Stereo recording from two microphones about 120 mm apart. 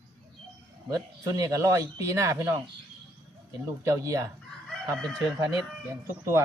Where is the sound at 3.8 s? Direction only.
25° right (ahead or behind).